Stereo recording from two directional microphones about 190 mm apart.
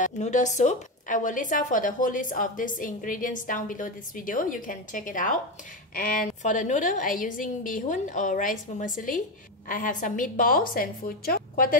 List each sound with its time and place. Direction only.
0.0 s a woman's voice: 40° left (ahead or behind)